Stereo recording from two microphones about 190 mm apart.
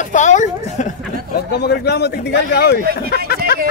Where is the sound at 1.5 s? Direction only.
60° left (ahead or behind).